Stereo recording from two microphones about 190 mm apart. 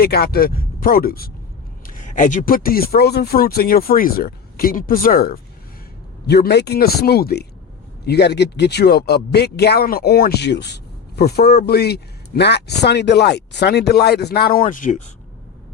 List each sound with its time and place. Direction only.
0.0 s speech: 55° left (ahead or behind)